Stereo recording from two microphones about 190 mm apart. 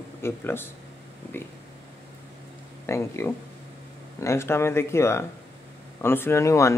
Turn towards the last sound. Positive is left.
turn(degrees=15)  # may be behind; listen again after turning